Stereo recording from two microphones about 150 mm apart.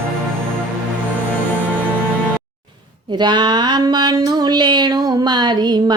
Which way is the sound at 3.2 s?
30° right (ahead or behind).